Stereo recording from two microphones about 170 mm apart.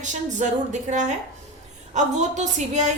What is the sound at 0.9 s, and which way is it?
Speech, 45° right (ahead or behind).